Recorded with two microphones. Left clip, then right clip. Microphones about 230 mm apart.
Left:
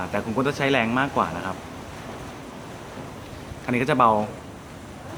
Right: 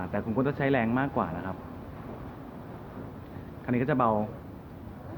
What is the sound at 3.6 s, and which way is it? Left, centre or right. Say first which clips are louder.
Speech: left 7 dB; centre.